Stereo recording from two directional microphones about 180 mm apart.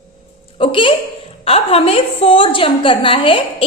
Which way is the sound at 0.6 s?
30° left (ahead or behind).